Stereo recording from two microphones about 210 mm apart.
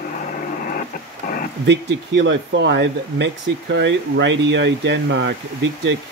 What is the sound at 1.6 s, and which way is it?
Speech, 60° right (ahead or behind).